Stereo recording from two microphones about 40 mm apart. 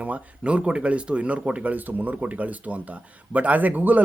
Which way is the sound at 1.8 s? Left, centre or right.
Right.